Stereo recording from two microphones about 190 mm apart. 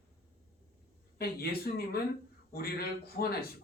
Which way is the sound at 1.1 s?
55° left (ahead or behind).